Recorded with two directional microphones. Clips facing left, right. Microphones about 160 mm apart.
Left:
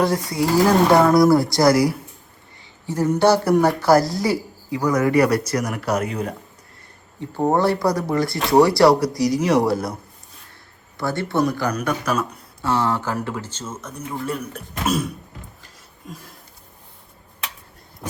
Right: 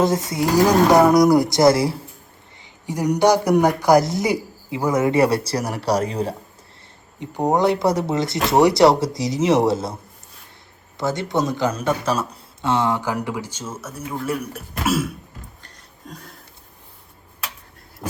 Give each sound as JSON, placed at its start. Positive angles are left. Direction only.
{"t": 0.0, "sound": "speech", "side_deg": -20}
{"t": 2.8, "sound": "speech", "side_deg": -15}
{"t": 7.2, "sound": "speech", "side_deg": -15}
{"t": 15.6, "sound": "a sound", "side_deg": 5}